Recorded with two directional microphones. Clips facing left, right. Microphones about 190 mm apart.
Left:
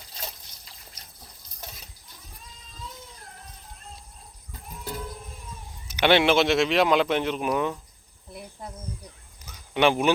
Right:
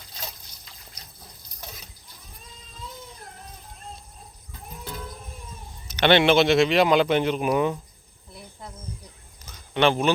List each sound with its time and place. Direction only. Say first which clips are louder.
6.0 s speech: right 2 dB; 5° left (ahead or behind)
8.3 s cricket: left 3 dB; 15° left (ahead or behind)
9.5 s a sound: even; 10° left (ahead or behind)